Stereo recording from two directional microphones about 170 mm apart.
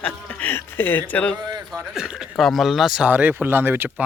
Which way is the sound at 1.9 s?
5° right (ahead or behind).